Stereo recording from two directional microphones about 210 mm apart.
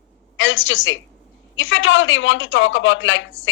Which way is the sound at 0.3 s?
65° left (ahead or behind).